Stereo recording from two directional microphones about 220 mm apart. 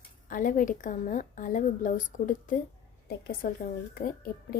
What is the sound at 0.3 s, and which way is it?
A woman's voice, 35° left (ahead or behind).